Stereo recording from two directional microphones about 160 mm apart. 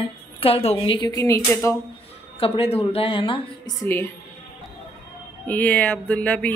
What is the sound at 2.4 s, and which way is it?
A woman's voice, 40° left (ahead or behind).